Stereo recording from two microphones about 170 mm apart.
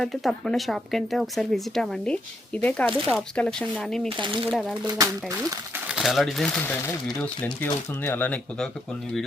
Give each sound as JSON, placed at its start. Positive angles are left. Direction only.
{"t": 0.0, "sound": "speech", "side_deg": 0}
{"t": 4.2, "sound": "speech", "side_deg": -30}
{"t": 4.9, "sound": "speech", "side_deg": -20}
{"t": 5.9, "sound": "speech", "side_deg": 0}